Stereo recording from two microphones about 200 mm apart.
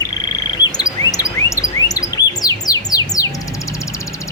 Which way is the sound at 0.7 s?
20° left (ahead or behind).